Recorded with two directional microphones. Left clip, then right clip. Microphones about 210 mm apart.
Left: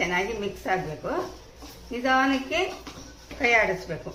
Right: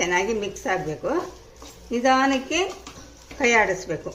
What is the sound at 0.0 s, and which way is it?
A woman's voice, 45° right (ahead or behind).